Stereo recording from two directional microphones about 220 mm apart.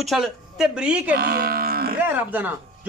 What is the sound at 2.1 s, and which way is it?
Speech, 10° right (ahead or behind).